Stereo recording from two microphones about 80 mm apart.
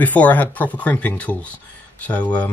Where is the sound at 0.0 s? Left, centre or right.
Left.